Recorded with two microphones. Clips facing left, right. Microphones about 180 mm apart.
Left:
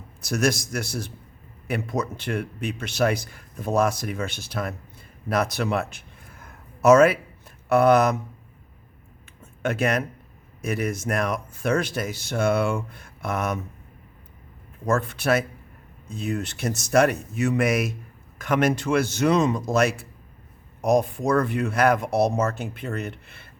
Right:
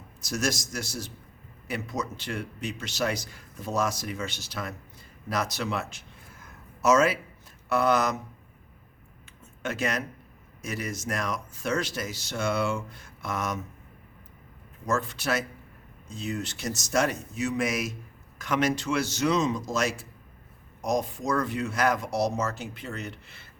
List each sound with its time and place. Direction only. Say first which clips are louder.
0.2 s a man's voice: left 6 dB; 60° left (ahead or behind)
5.3 s a sound: left 6 dB; 55° left (ahead or behind)
7.7 s a man's voice: left 7 dB; 55° left (ahead or behind)
9.6 s a man's voice: left 6 dB; 55° left (ahead or behind)
14.8 s a man's voice: left 6 dB; 55° left (ahead or behind)